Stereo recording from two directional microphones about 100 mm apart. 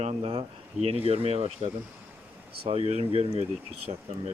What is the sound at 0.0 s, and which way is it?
Speech, 80° right.